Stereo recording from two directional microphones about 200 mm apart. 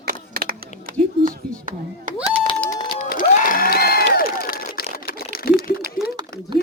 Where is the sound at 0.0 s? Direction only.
45° right (ahead or behind).